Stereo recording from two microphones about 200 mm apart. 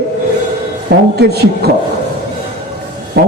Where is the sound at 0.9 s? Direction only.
55° right (ahead or behind).